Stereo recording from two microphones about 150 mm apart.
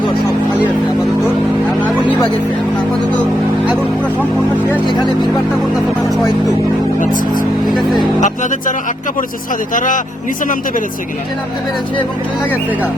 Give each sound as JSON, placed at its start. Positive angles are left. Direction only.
{"t": 1.8, "sound": "vehicle", "side_deg": 10}
{"t": 7.0, "sound": "speech", "side_deg": 60}
{"t": 9.7, "sound": "speech", "side_deg": 60}